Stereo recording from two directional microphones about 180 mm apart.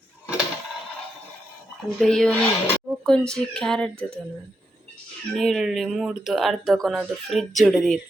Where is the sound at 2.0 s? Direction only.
5° left (ahead or behind).